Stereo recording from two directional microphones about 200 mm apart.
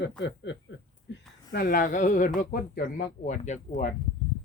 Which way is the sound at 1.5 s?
45° left (ahead or behind).